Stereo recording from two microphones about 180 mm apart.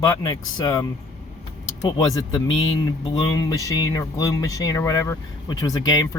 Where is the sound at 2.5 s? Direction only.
90° left.